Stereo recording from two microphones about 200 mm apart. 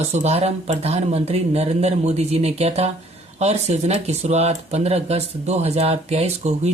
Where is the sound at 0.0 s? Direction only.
35° right (ahead or behind).